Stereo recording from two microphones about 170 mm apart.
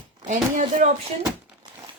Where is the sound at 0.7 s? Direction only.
45° right (ahead or behind).